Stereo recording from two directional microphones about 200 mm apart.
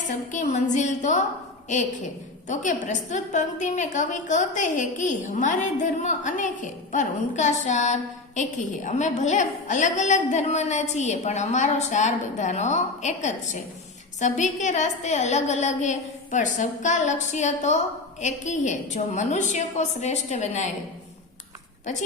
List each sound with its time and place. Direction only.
0.3 s a woman's voice: 40° left (ahead or behind)
2.5 s a woman's voice: 40° left (ahead or behind)